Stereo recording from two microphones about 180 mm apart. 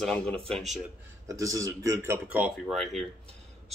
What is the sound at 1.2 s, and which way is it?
Speech, 20° right (ahead or behind).